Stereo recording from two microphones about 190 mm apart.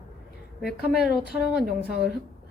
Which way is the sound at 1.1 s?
55° left (ahead or behind).